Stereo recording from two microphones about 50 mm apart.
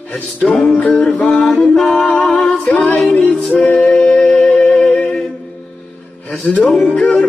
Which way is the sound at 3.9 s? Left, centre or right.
Centre.